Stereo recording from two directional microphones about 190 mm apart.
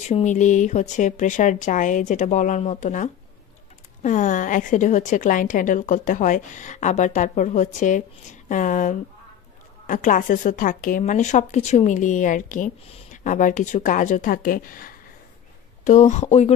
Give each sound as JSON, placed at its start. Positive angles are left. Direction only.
{"t": 0.1, "sound": "a woman's voice", "side_deg": 40}